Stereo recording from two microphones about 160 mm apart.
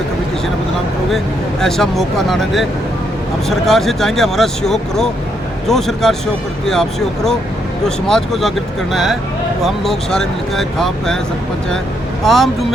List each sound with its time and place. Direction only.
1.6 s speech: 5° left (ahead or behind)
7.9 s speech: 5° left (ahead or behind)
12.2 s speech: centre (ahead or behind)